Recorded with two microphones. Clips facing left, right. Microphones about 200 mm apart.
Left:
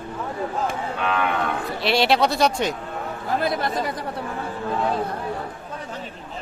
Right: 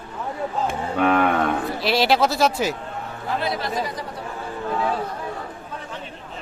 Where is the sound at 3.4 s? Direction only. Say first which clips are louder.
Left 3 dB; 50° left (ahead or behind).